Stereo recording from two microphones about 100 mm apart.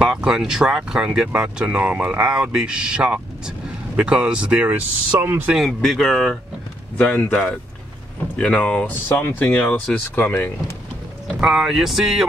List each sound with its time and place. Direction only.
0.0 s speech: 5° right (ahead or behind)
5.2 s speech: 25° right (ahead or behind)
5.5 s speech: centre (ahead or behind); by 10.5 s 15° left (ahead or behind)
11.4 s speech: 5° right (ahead or behind)